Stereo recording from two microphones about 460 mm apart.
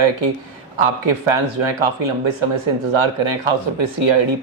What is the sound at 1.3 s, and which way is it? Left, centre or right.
Speech, right.